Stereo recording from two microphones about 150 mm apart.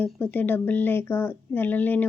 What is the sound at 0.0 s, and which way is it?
A woman's voice, 10° left (ahead or behind).